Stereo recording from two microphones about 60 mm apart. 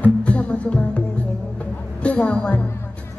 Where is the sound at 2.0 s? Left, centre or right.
Left.